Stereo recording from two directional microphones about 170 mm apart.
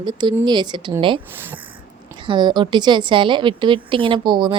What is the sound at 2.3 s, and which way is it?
A woman's voice, 25° right (ahead or behind).